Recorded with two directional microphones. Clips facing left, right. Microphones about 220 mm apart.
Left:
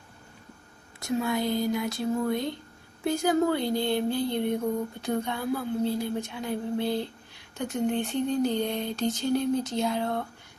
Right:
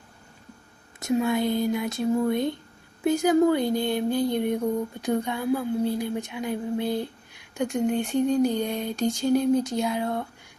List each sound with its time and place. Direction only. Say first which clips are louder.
0.9 s speech: right 4 dB; 20° right (ahead or behind)
1.5 s music: right 2 dB; 20° right (ahead or behind)
3.0 s a woman's voice: right 4 dB; 15° right (ahead or behind)